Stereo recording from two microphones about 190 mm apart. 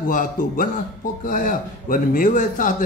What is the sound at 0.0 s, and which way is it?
Speech, 45° left (ahead or behind).